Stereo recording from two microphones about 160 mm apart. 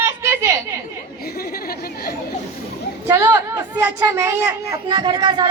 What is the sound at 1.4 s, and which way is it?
Speech, 70° left (ahead or behind).